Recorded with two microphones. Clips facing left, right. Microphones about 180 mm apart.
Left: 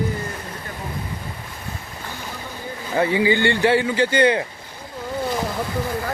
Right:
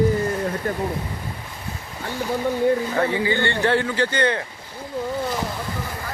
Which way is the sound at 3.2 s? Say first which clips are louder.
Left 3 dB; 10° left (ahead or behind).